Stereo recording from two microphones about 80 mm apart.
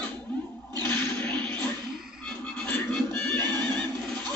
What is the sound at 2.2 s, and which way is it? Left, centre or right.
Music, centre.